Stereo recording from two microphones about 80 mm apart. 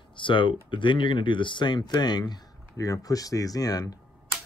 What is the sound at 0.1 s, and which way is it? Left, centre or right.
Speech, left.